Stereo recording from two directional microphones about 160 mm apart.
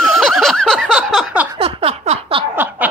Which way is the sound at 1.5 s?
40° right (ahead or behind).